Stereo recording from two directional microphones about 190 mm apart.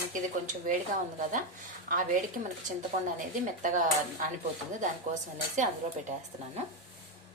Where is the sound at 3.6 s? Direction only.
40° right (ahead or behind).